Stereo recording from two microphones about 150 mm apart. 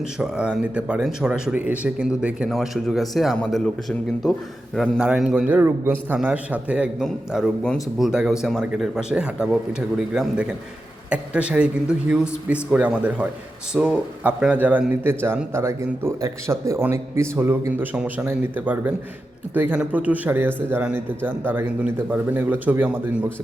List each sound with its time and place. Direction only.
0.0 s speech: 5° right (ahead or behind)